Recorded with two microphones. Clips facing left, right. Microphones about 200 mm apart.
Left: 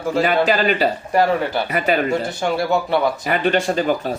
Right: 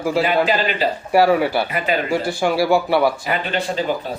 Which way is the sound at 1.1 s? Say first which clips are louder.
Right 5 dB; 10° right (ahead or behind).